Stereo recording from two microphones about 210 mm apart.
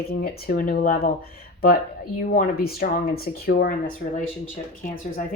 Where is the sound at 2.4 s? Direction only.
45° left (ahead or behind).